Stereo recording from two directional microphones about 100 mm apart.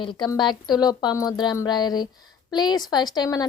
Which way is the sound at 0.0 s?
50° left (ahead or behind).